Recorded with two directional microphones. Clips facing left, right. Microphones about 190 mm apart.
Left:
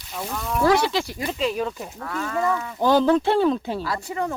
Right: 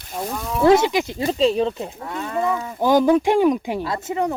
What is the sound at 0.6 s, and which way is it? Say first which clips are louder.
Speech: right 5 dB; 20° right (ahead or behind).